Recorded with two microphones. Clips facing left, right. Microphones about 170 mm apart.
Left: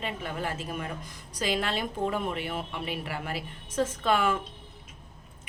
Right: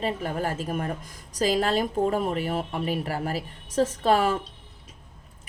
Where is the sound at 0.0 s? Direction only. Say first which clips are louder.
Right 6 dB; 40° right (ahead or behind).